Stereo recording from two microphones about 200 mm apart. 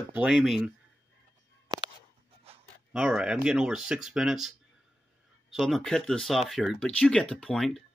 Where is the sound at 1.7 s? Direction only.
20° right (ahead or behind).